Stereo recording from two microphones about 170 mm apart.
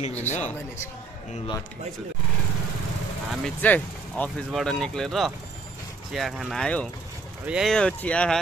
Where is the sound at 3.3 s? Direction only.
5° left (ahead or behind).